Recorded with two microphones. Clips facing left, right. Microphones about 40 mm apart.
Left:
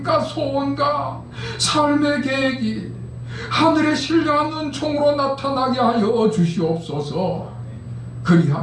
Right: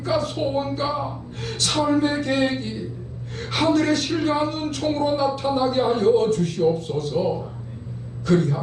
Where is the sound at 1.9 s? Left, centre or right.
Centre.